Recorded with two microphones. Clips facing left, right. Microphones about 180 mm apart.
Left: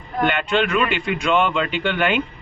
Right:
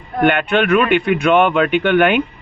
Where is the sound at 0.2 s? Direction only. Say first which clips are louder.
Right 5 dB; 60° right (ahead or behind).